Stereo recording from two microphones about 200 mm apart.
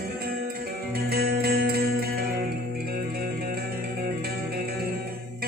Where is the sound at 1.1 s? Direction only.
50° right (ahead or behind).